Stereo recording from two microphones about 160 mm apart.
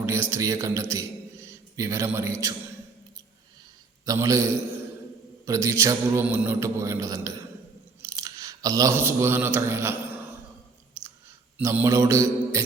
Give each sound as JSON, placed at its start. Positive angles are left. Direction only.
{"t": 0.0, "sound": "a man's voice", "side_deg": -15}
{"t": 4.0, "sound": "a man's voice", "side_deg": -20}
{"t": 6.2, "sound": "mantra", "side_deg": -10}
{"t": 8.0, "sound": "speech", "side_deg": -20}
{"t": 11.5, "sound": "mantra", "side_deg": -15}